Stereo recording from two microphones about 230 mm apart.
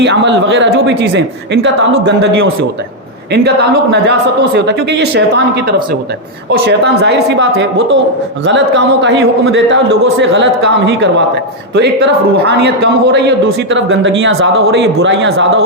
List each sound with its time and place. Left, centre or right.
0.0 s a man's voice: right
4.5 s a man's voice: right
6.5 s a man's voice: right